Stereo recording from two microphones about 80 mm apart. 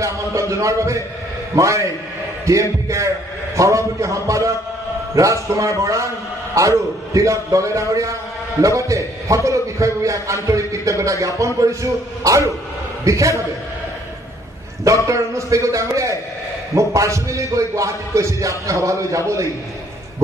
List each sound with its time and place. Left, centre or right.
0.0 s a man's voice: right
7.2 s a man's voice: right
15.0 s a man's voice: right